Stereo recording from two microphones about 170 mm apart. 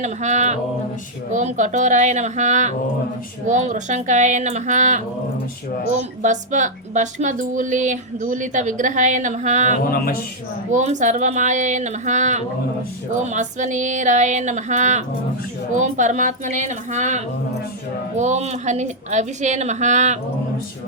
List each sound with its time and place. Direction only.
0.0 s a woman's voice: 45° right (ahead or behind)
9.8 s a sound: 60° left (ahead or behind)
10.7 s a woman's voice: 45° right (ahead or behind)